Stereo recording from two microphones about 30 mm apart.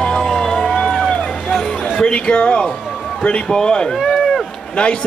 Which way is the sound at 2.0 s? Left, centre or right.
Left.